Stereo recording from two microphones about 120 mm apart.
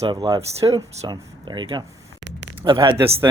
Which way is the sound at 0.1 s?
40° right (ahead or behind).